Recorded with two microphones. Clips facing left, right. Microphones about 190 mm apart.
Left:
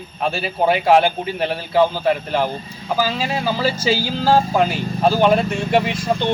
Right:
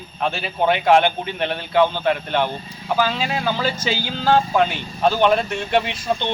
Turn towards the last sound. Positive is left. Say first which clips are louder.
# left 3 dB
turn(degrees=40)  # may be behind; listen again after turning